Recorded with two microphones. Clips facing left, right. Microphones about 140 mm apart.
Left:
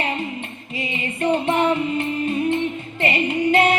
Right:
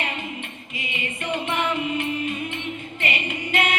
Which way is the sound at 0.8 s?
35° left (ahead or behind).